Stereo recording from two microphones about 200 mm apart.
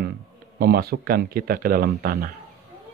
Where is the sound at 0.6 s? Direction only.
50° right (ahead or behind).